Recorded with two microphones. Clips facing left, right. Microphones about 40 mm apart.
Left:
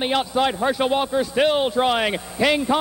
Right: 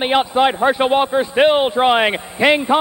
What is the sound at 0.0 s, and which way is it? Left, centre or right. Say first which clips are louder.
A man's voice: right 6 dB; right.